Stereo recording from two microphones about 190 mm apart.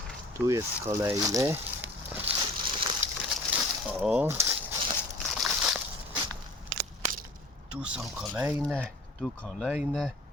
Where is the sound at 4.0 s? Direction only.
10° right (ahead or behind).